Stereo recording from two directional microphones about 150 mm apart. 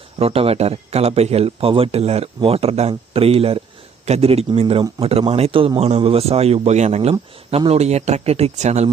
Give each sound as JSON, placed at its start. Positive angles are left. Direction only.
{"t": 0.2, "sound": "a man's voice", "side_deg": -40}